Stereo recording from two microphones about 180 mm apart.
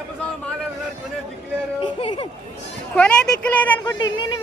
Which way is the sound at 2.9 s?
5° left (ahead or behind).